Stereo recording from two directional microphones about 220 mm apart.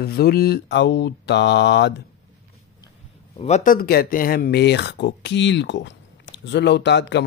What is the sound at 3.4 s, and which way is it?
Speech, 30° left (ahead or behind).